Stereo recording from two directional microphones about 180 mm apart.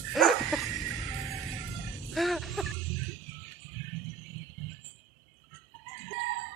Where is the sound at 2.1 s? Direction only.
Centre (ahead or behind).